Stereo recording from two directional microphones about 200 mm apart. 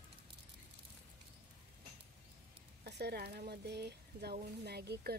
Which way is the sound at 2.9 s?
55° right (ahead or behind).